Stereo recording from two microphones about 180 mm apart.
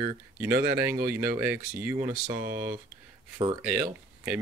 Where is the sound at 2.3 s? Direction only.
55° right (ahead or behind).